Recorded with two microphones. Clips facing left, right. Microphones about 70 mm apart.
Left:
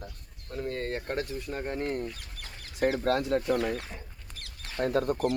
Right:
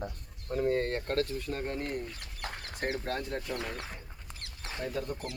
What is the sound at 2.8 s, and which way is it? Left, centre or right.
Speech, left.